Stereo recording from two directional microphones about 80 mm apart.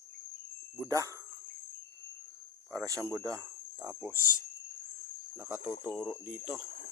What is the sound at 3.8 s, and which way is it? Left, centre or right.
Speech, right.